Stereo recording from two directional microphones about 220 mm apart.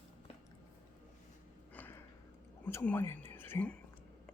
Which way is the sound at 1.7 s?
10° left (ahead or behind).